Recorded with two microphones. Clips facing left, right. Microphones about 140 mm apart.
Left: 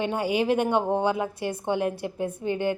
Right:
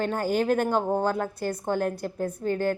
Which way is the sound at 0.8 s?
25° left (ahead or behind).